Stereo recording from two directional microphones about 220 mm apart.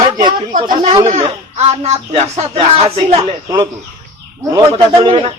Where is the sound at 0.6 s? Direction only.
20° right (ahead or behind).